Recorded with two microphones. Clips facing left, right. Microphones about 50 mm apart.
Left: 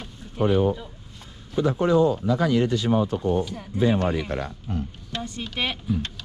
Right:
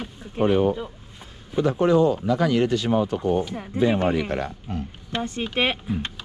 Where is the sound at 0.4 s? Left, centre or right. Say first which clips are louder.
Right 1 dB; right.